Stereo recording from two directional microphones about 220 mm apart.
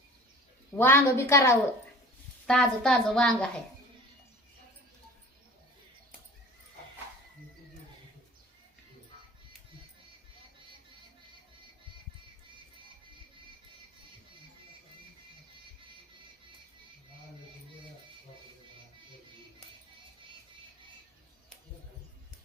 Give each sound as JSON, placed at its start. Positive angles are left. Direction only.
{"t": 0.8, "sound": "a woman's voice", "side_deg": 10}